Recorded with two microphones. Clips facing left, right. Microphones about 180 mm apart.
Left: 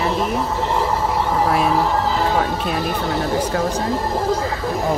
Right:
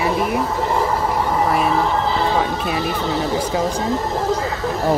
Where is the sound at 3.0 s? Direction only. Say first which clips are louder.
Even; 10° left (ahead or behind).